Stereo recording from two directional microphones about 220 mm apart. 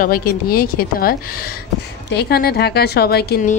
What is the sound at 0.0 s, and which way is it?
Speech, 40° left (ahead or behind).